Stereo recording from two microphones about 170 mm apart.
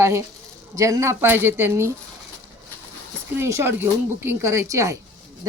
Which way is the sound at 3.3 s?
15° right (ahead or behind).